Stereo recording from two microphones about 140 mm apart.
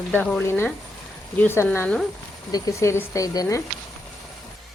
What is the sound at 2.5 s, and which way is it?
Speech, 20° left (ahead or behind).